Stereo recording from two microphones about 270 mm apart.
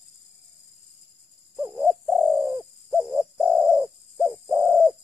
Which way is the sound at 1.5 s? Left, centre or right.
Centre.